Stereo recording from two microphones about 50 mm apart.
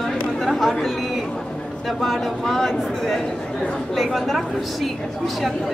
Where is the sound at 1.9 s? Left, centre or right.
Centre.